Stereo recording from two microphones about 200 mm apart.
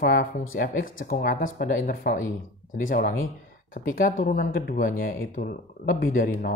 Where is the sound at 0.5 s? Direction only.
50° left (ahead or behind).